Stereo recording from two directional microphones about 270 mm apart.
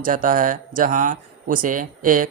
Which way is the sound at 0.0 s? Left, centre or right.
Right.